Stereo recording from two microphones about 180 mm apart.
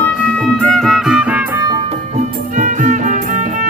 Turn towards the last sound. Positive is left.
turn(degrees=-45)  # may be behind; listen again after turning